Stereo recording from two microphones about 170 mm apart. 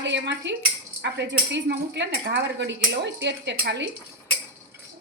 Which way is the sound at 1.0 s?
90° right.